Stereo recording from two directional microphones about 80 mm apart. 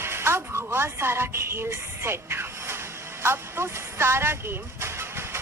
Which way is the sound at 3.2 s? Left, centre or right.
Right.